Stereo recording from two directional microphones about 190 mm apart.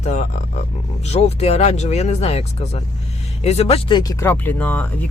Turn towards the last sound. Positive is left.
turn(degrees=10)  # may be behind; listen again after turning